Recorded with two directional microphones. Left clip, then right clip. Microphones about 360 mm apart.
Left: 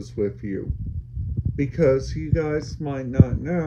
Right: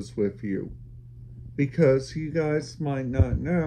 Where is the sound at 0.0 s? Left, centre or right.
Right.